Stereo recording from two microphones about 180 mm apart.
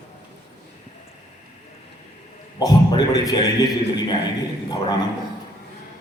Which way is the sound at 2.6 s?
20° left (ahead or behind).